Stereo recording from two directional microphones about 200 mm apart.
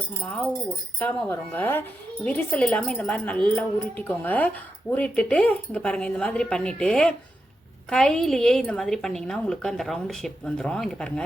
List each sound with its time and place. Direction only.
0.2 s a woman's voice: 5° left (ahead or behind)